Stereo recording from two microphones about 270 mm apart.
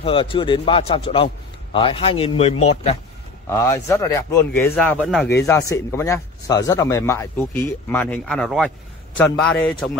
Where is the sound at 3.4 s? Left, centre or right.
Centre.